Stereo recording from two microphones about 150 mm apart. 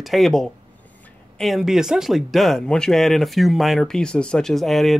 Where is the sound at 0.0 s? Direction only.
Centre (ahead or behind).